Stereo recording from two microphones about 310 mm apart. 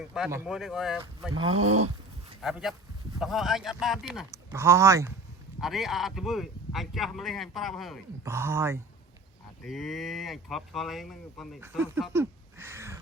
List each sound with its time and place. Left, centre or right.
0.1 s speech: centre
1.3 s speech: centre
1.6 s a sound: right
2.4 s speech: centre